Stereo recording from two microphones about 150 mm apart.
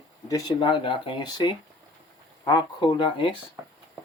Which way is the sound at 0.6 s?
35° left (ahead or behind).